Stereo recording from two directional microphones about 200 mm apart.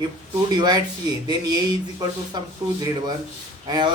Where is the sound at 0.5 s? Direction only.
20° right (ahead or behind).